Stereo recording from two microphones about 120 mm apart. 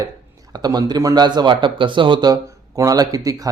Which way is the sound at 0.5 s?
35° right (ahead or behind).